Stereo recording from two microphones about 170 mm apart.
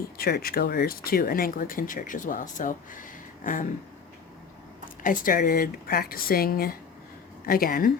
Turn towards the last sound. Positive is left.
turn(degrees=60)  # may be behind; listen again after turning